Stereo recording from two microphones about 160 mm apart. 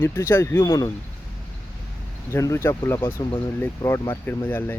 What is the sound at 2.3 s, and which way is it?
Speech, 20° left (ahead or behind).